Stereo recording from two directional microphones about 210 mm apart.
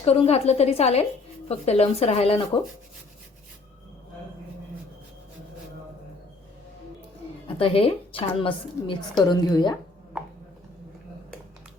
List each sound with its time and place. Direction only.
0.0 s speech: 30° left (ahead or behind)
7.4 s a woman's voice: 25° left (ahead or behind)